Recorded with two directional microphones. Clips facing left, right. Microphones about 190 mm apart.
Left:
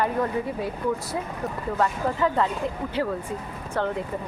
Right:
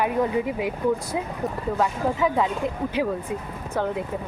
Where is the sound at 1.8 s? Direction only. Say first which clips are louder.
Right 1 dB; 10° right (ahead or behind).